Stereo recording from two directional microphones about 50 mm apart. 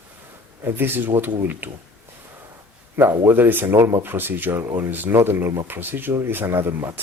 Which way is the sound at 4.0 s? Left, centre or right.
Right.